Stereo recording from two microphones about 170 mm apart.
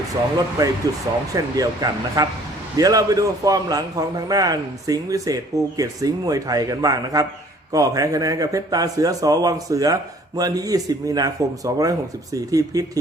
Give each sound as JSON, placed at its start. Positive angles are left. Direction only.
{"t": 0.6, "sound": "a man's voice", "side_deg": -20}